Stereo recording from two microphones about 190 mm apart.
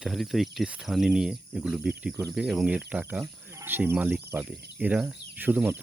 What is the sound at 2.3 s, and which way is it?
Cricket, 5° right (ahead or behind).